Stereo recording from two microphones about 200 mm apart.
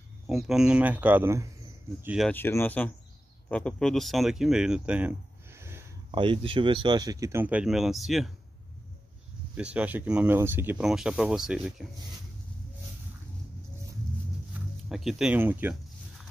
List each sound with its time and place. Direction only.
0.3 s speech: centre (ahead or behind)
2.0 s speech: centre (ahead or behind)
2.3 s speech: 10° left (ahead or behind); by 5.9 s 10° right (ahead or behind)
6.1 s speech: 25° right (ahead or behind); by 8.3 s centre (ahead or behind)
9.6 s speech: 5° right (ahead or behind)
14.9 s speech: centre (ahead or behind)